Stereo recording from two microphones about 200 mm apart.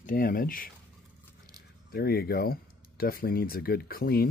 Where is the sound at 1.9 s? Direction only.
50° left (ahead or behind).